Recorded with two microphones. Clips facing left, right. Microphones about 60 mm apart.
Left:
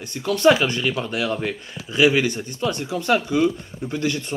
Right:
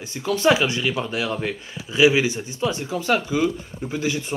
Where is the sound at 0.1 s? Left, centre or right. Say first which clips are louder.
Left 2 dB; centre.